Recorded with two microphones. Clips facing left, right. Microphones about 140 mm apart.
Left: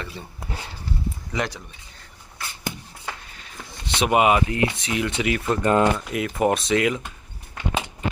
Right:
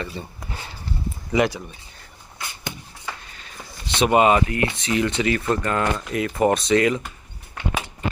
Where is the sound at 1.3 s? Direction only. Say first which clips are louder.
Right 8 dB; 10° right (ahead or behind).